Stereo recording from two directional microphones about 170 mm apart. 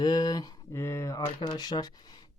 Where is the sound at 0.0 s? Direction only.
25° left (ahead or behind).